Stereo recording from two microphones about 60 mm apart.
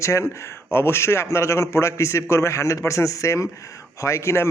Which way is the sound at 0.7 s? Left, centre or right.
Left.